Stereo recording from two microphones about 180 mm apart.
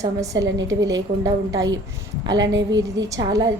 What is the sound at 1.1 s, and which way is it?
Speech, 45° right (ahead or behind).